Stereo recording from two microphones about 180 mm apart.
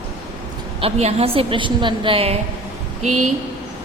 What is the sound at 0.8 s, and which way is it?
A woman's voice, 35° right (ahead or behind).